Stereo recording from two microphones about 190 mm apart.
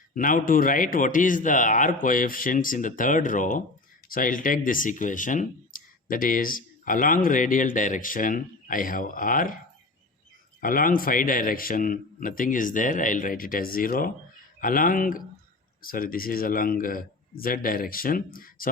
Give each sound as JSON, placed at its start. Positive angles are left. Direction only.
{"t": 0.1, "sound": "speech", "side_deg": 45}
{"t": 10.6, "sound": "speech", "side_deg": 45}